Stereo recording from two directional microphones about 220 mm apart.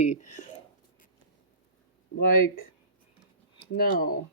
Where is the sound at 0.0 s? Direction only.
35° left (ahead or behind).